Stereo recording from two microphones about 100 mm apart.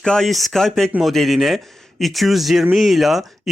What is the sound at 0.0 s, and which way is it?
Speech, 5° left (ahead or behind).